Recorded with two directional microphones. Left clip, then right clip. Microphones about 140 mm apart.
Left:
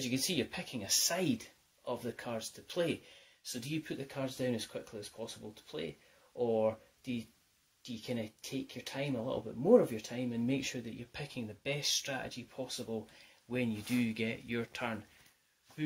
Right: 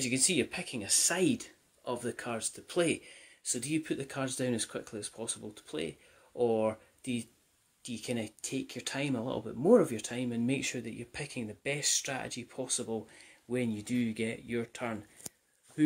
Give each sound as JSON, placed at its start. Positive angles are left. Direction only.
{"t": 0.0, "sound": "speech", "side_deg": -30}